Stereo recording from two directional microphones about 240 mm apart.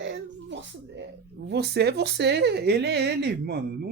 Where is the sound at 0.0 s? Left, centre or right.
Right.